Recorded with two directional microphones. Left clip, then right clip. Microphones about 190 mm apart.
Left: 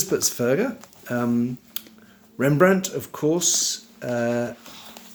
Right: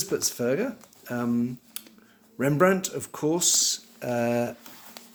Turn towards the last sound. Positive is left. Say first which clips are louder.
# left 3 dB
turn(degrees=-20)  # may be behind; listen again after turning